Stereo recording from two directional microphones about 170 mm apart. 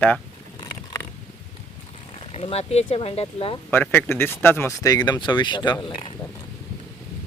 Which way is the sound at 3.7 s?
10° left (ahead or behind).